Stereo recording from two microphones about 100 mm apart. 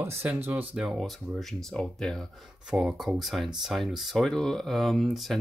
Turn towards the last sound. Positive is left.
turn(degrees=0)  # may be behind; listen again after turning